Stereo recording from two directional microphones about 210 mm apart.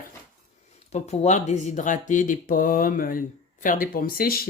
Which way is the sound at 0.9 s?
30° left (ahead or behind).